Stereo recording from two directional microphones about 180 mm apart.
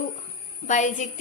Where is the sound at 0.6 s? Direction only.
45° left (ahead or behind).